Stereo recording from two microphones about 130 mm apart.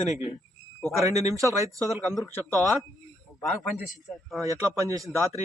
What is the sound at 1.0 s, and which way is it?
Speech, 25° right (ahead or behind).